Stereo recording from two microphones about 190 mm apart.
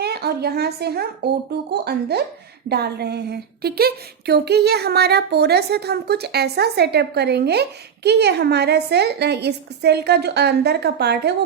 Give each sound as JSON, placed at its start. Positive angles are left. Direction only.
{"t": 0.0, "sound": "speech", "side_deg": -55}